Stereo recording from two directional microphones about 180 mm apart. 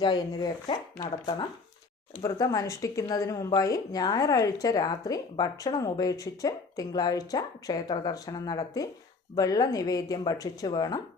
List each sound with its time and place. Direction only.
0.0 s a woman's voice: 20° left (ahead or behind)